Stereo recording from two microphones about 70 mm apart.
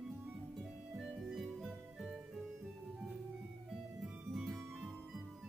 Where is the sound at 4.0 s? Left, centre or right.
Centre.